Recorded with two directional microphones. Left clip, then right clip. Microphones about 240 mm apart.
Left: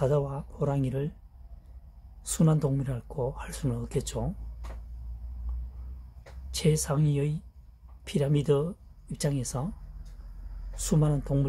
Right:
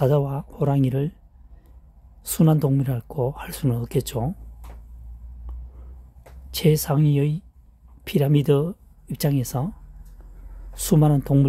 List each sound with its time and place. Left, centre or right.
0.0 s speech: right
2.2 s speech: right
6.5 s speech: right
10.7 s speech: right